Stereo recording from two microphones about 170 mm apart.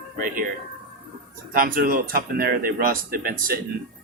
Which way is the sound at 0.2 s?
55° right (ahead or behind).